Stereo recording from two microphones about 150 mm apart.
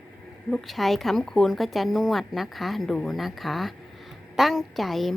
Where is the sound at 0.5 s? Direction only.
Centre (ahead or behind).